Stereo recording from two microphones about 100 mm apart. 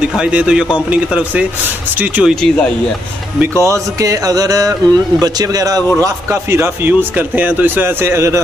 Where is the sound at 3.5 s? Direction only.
30° right (ahead or behind).